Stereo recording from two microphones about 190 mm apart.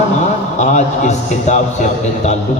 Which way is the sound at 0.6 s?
40° left (ahead or behind).